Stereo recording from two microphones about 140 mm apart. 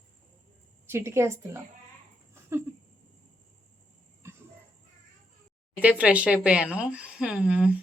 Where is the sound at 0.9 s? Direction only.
20° right (ahead or behind).